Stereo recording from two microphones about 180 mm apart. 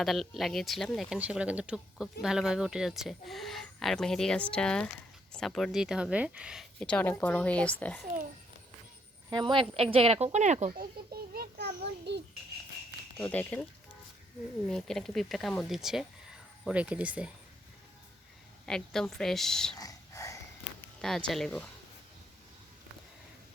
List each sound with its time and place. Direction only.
0.0 s speech: centre (ahead or behind)
9.3 s a woman's voice: 25° right (ahead or behind); by 10.8 s 40° right (ahead or behind)
10.8 s a sound: 60° right (ahead or behind)
13.1 s speech: 10° left (ahead or behind)
14.7 s speech: 5° left (ahead or behind)
18.6 s speech: 5° left (ahead or behind)
19.8 s whispering: 20° left (ahead or behind)
21.0 s speech: 5° left (ahead or behind)